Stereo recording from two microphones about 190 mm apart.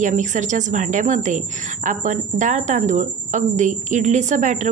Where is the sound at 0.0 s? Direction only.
40° right (ahead or behind).